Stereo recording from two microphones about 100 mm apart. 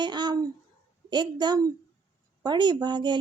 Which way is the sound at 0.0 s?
50° right (ahead or behind).